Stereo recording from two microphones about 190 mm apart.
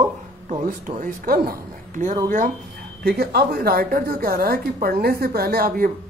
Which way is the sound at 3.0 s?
55° right (ahead or behind).